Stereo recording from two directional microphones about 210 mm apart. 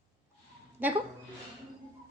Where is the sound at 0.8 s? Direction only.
10° right (ahead or behind).